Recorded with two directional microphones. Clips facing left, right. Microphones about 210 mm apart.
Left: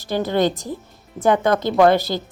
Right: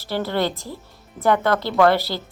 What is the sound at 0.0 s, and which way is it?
A woman's voice, 15° left (ahead or behind).